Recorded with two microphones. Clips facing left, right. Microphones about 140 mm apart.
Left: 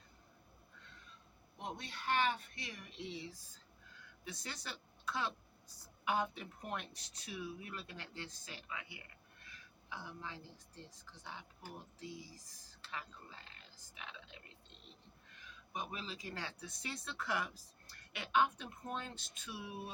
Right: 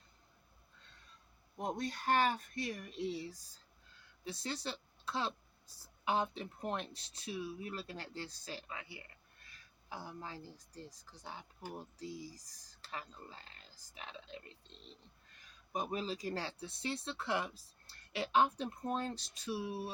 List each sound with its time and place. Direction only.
1.5 s speech: 40° right (ahead or behind)
4.2 s speech: 30° right (ahead or behind)